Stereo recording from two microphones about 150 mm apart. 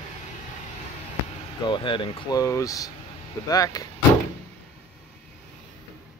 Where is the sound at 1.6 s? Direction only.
35° left (ahead or behind).